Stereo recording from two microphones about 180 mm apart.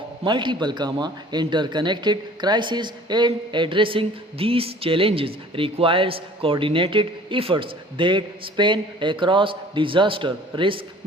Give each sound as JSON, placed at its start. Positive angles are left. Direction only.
{"t": 0.3, "sound": "speech", "side_deg": -25}